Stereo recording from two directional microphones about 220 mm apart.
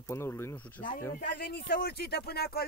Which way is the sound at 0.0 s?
10° left (ahead or behind).